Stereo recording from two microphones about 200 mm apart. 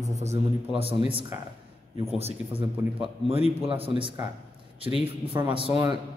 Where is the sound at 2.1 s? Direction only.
30° right (ahead or behind).